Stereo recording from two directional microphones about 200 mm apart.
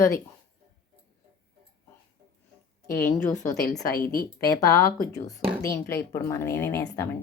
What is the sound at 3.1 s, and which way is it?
A woman's voice, 10° left (ahead or behind).